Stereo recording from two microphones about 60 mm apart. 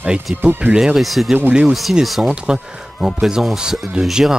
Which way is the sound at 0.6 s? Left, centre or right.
Centre.